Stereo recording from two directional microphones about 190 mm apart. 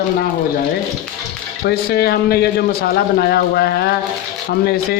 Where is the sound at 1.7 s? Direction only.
55° left (ahead or behind).